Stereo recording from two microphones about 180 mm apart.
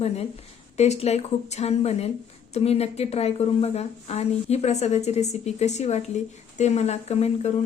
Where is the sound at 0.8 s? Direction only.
35° left (ahead or behind).